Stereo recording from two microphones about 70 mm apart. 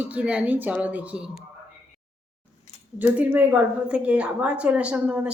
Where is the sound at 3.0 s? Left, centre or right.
Right.